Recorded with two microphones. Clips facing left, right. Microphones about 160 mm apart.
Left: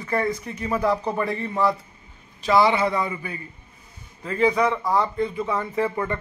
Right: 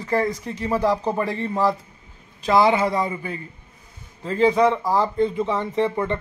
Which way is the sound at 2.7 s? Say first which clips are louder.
Right 2 dB; 40° right (ahead or behind).